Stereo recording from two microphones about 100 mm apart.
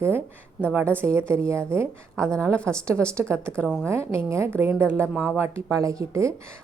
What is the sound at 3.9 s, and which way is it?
A woman's voice, 30° right (ahead or behind).